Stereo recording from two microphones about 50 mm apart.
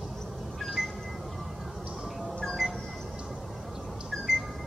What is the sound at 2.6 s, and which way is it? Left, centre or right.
Music, centre.